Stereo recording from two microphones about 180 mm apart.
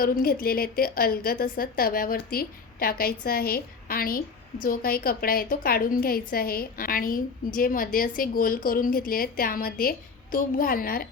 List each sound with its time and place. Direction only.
0.0 s a woman's voice: 55° left (ahead or behind)